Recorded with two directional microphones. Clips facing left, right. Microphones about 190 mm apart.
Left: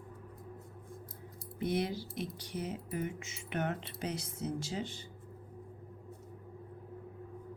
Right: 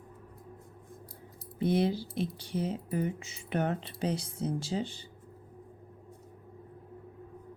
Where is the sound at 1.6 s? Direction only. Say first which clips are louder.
Right 6 dB; 30° right (ahead or behind).